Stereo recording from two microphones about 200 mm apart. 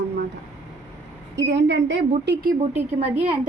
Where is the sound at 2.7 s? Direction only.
30° right (ahead or behind).